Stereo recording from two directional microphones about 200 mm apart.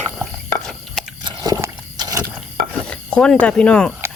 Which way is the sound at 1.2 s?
20° right (ahead or behind).